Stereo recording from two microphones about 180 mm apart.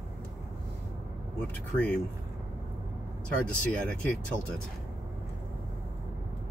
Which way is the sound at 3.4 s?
5° left (ahead or behind).